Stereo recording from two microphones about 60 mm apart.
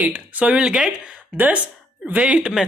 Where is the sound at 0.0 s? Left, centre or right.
Right.